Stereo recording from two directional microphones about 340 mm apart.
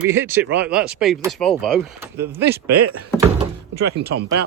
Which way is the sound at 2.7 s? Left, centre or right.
Right.